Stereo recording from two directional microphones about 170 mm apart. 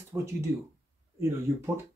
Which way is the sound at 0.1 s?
15° right (ahead or behind).